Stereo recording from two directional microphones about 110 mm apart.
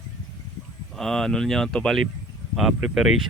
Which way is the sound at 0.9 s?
5° left (ahead or behind).